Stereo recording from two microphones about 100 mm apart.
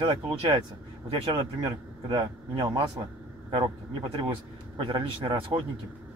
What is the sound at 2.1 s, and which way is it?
Speech, 50° right (ahead or behind).